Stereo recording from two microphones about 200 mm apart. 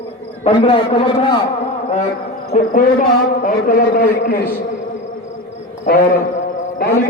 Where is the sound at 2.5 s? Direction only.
45° left (ahead or behind).